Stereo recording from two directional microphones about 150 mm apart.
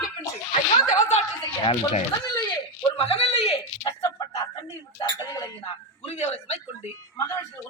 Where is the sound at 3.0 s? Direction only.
45° left (ahead or behind).